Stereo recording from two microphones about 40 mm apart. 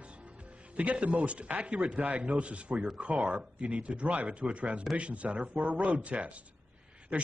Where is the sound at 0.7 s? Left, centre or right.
Right.